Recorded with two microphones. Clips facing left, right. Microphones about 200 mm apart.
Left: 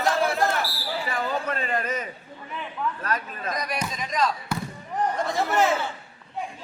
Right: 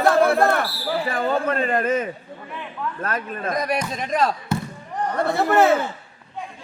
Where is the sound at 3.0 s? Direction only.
50° right (ahead or behind).